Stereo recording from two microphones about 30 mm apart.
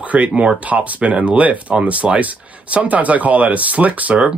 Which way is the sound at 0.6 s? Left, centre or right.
Right.